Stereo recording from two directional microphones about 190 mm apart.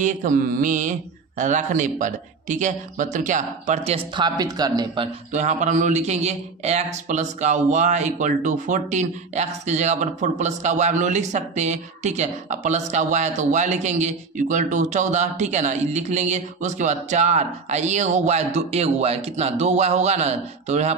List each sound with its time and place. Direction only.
0.0 s mantra: 40° right (ahead or behind)
1.4 s speech: 40° right (ahead or behind)